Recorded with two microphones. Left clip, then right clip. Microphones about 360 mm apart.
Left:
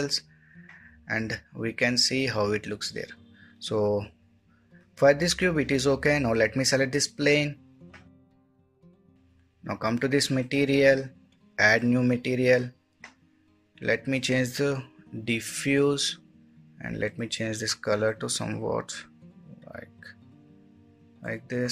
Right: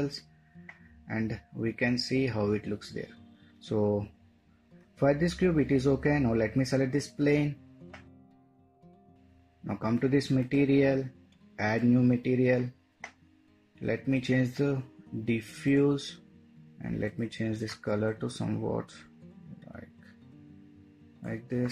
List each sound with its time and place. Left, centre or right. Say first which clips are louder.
1.0 s speech: left 6 dB; left
3.6 s speech: left 4 dB; left
9.7 s speech: left 3 dB; left
13.7 s speech: left 5 dB; left
21.2 s speech: left 4 dB; left